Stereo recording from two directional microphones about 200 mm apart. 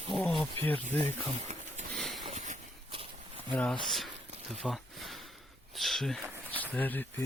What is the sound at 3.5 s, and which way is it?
Speech, 5° left (ahead or behind).